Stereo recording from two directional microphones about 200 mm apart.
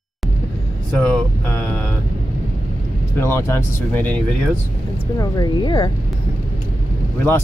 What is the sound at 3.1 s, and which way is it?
Speech, 15° left (ahead or behind).